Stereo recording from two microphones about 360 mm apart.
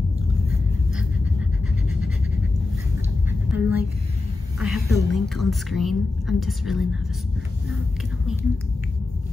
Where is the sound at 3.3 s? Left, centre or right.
Centre.